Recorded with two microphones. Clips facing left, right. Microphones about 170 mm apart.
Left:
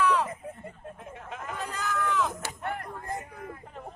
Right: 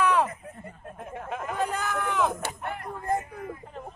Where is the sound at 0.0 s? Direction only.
55° right (ahead or behind).